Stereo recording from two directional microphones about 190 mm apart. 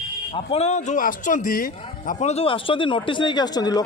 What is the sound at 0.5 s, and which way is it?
Speech, 35° left (ahead or behind).